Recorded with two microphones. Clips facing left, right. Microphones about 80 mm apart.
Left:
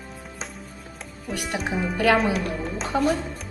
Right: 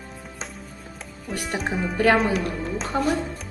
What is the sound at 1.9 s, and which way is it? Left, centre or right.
Speech, right.